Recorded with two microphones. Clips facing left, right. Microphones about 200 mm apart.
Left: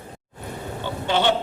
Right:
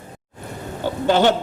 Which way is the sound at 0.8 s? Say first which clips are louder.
Right 5 dB; 40° right (ahead or behind).